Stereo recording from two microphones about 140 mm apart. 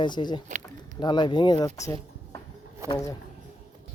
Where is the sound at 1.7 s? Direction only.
25° left (ahead or behind).